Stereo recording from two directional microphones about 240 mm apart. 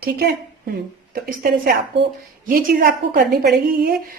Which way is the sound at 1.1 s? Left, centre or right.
Right.